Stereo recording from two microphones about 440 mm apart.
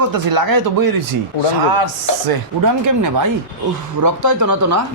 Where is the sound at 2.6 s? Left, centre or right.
Right.